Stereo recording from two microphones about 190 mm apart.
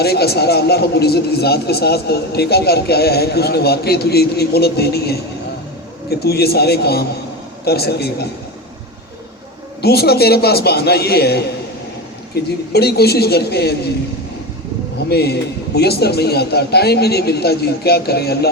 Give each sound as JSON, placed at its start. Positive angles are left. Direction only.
{"t": 0.0, "sound": "a man's voice", "side_deg": 55}
{"t": 9.8, "sound": "a man's voice", "side_deg": 55}
{"t": 15.1, "sound": "a man's voice", "side_deg": 55}